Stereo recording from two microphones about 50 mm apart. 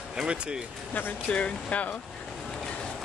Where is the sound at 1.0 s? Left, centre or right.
Left.